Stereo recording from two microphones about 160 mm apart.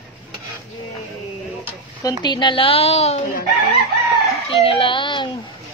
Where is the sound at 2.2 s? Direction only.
30° left (ahead or behind).